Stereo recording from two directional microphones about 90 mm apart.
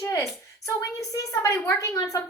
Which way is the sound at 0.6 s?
40° left (ahead or behind).